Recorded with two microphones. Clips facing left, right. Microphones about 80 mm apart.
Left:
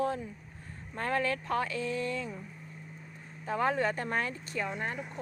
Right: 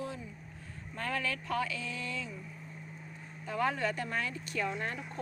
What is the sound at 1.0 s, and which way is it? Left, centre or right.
A woman's voice, left.